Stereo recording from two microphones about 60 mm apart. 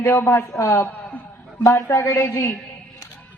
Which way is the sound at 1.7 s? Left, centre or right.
Left.